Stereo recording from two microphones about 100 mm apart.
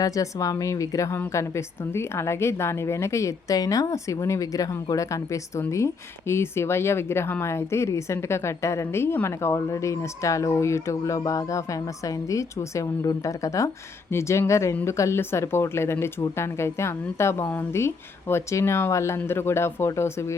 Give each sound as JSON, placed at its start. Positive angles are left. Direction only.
{"t": 0.0, "sound": "a woman's voice", "side_deg": 35}